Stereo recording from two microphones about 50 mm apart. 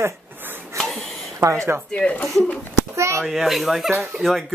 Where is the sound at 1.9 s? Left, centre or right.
Centre.